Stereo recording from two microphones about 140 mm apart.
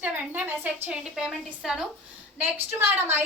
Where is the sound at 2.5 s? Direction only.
15° right (ahead or behind).